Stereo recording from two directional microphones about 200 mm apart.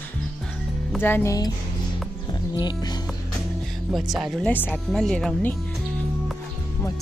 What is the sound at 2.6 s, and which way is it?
Speech, 20° left (ahead or behind).